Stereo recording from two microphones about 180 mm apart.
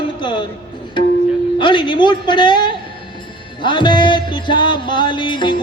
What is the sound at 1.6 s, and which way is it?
Music, 25° left (ahead or behind).